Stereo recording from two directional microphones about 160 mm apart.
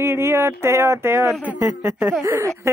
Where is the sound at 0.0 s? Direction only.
15° right (ahead or behind).